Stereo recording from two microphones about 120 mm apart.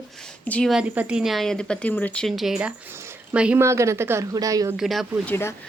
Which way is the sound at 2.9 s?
20° right (ahead or behind).